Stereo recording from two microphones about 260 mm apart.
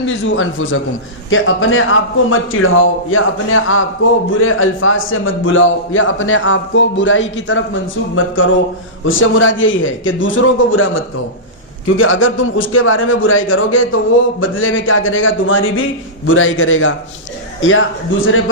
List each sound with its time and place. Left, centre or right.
0.0 s a man's voice: left